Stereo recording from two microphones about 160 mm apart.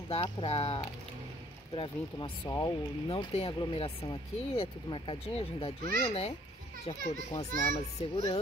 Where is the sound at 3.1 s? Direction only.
35° left (ahead or behind).